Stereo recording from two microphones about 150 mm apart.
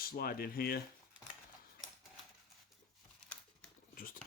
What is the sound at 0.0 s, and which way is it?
Speech, 85° left.